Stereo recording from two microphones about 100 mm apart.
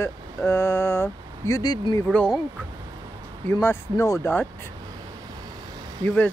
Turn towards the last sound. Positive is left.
turn(degrees=20)  # may be behind; listen again after turning